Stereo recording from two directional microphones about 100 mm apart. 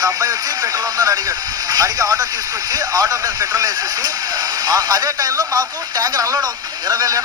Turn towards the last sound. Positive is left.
turn(degrees=-40)  # may be behind; listen again after turning